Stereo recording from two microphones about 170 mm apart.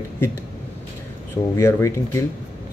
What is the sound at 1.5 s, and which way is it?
Speech, 15° left (ahead or behind).